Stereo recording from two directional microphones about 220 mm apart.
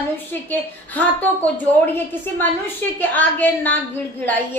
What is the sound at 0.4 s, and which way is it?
Speech, 10° left (ahead or behind).